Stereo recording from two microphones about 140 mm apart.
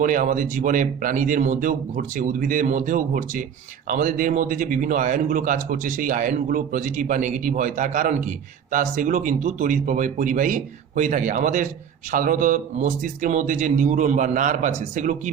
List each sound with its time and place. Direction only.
0.0 s speech: 70° right (ahead or behind)